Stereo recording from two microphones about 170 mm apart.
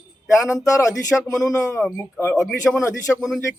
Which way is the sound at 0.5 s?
20° left (ahead or behind).